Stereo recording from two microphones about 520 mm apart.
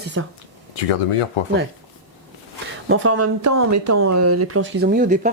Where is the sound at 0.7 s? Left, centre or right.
Left.